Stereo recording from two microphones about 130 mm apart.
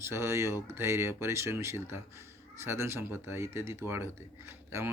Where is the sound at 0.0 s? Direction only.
20° right (ahead or behind).